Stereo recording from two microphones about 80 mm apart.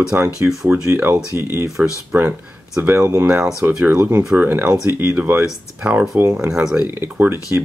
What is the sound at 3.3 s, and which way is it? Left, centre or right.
Speech, right.